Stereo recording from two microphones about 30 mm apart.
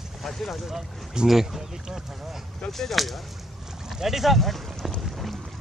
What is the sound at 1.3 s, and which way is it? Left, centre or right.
Speech, centre.